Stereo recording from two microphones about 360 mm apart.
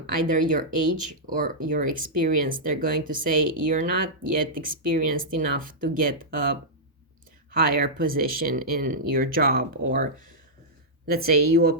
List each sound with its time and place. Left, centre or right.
0.1 s speech: right